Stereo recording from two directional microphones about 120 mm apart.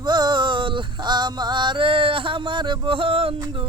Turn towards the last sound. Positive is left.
turn(degrees=-50)  # may be behind; listen again after turning